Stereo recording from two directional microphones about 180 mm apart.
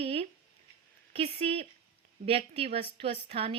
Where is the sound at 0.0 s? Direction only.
35° right (ahead or behind).